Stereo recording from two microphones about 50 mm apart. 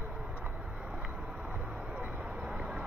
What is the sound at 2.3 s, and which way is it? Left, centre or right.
Vehicle, centre.